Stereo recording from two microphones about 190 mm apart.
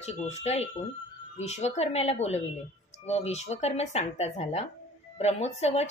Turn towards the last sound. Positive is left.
turn(degrees=35)  # may be behind; listen again after turning